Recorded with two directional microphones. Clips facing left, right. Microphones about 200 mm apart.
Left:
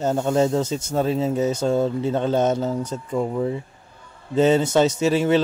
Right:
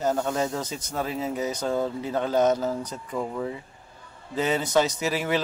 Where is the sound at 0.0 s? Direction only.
25° left (ahead or behind).